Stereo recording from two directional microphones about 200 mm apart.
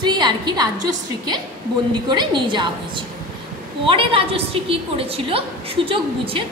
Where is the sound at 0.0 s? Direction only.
20° right (ahead or behind).